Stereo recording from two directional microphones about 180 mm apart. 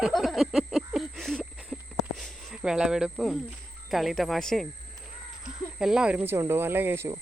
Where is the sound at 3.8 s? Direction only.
Centre (ahead or behind).